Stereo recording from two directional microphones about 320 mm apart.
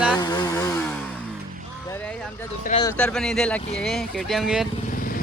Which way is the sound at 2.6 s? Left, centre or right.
Centre.